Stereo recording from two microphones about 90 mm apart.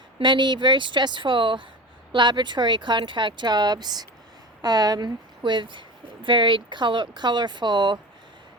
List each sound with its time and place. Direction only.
0.2 s a woman's voice: 60° right (ahead or behind)